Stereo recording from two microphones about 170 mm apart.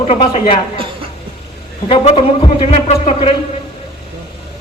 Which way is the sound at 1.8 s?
35° left (ahead or behind).